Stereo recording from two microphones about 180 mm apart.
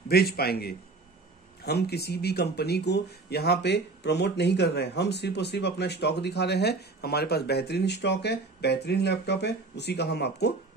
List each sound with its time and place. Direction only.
0.1 s a man's voice: 60° left (ahead or behind)